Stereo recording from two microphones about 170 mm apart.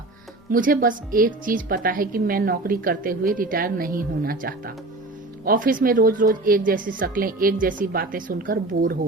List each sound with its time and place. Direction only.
0.5 s speech: 55° right (ahead or behind)